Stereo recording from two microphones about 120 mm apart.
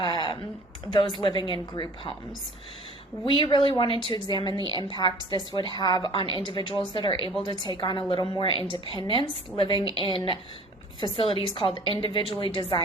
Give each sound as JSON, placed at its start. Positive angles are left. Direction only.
{"t": 0.0, "sound": "a sound", "side_deg": 40}
{"t": 0.9, "sound": "a woman's voice", "side_deg": 40}
{"t": 3.2, "sound": "a woman's voice", "side_deg": 45}